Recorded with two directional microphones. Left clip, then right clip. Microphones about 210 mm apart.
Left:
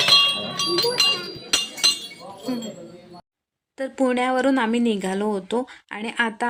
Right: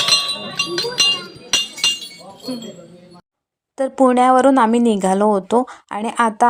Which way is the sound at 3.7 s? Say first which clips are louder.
Right 8 dB; 20° right (ahead or behind).